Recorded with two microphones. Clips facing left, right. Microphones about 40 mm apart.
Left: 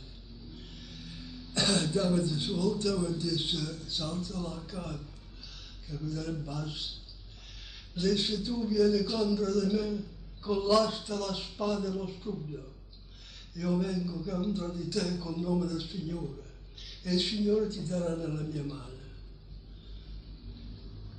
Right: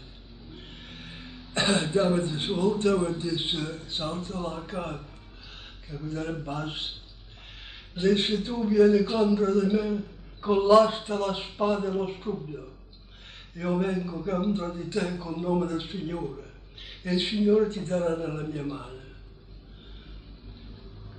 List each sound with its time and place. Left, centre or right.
0.5 s a man's voice: right
17.0 s a man's voice: right